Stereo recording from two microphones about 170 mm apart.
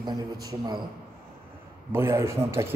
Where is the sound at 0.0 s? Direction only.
20° right (ahead or behind).